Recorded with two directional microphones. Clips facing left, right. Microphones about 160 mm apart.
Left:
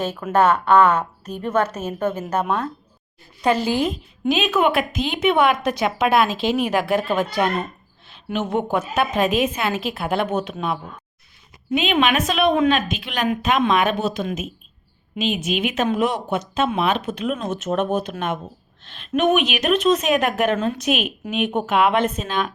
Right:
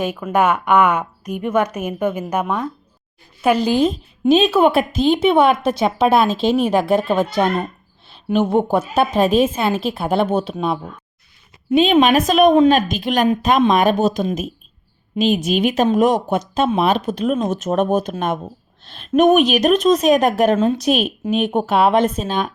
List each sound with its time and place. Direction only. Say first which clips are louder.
0.3 s a woman's voice: even; 10° right (ahead or behind)
3.8 s a woman's voice: right 5 dB; 25° right (ahead or behind)